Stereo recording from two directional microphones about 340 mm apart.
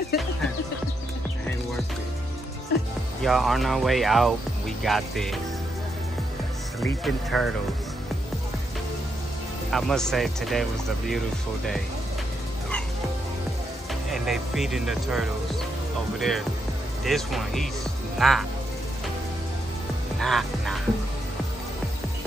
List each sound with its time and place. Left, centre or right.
2.7 s music: left
3.2 s speech: centre
6.8 s speech: centre
9.7 s speech: centre
14.1 s speech: centre
20.2 s speech: centre